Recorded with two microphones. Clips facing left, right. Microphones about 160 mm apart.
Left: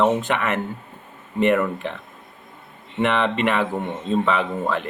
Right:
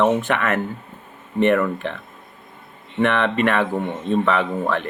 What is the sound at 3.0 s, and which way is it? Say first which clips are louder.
Speech: right 2 dB; 15° left (ahead or behind).